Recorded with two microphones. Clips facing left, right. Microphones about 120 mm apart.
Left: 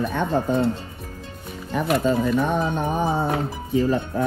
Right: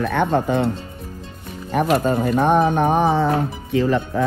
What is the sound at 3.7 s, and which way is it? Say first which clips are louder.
Speech: right 2 dB; 90° right.